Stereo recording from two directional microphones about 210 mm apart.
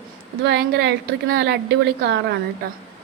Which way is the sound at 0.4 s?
50° right (ahead or behind).